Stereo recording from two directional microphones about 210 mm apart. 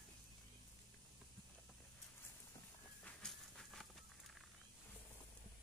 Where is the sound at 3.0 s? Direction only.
5° left (ahead or behind).